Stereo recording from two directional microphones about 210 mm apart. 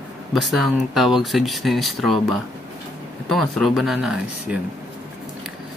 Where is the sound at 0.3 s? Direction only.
Centre (ahead or behind).